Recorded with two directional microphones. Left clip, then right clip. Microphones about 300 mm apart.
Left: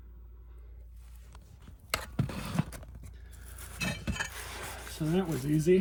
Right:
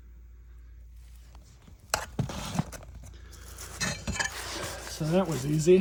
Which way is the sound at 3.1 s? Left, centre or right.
Right.